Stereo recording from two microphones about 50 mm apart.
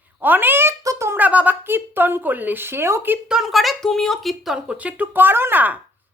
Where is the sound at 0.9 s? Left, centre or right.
Right.